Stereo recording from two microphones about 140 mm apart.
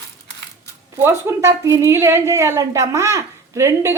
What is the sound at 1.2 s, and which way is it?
A woman's voice, 20° right (ahead or behind).